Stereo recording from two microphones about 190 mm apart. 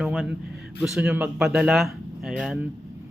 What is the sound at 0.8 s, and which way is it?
Speech, 5° right (ahead or behind).